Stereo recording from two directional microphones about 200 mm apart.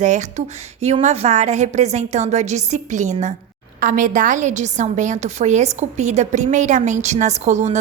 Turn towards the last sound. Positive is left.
turn(degrees=-35)  # may be behind; listen again after turning